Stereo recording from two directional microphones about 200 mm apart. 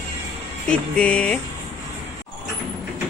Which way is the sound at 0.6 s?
5° left (ahead or behind).